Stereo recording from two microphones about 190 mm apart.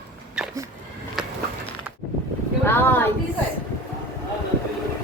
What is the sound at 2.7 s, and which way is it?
Speech, 10° left (ahead or behind).